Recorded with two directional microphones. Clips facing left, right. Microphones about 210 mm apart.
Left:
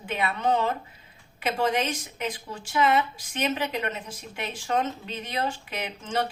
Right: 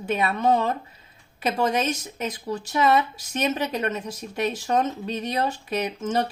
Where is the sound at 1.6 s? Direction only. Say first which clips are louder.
Right 2 dB; 40° right (ahead or behind).